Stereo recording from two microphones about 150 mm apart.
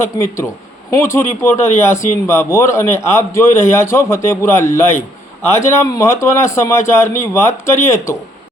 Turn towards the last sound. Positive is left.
turn(degrees=15)  # may be behind; listen again after turning